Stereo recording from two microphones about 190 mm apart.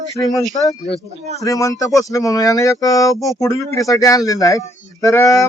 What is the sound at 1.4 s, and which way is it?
Speech, 15° left (ahead or behind).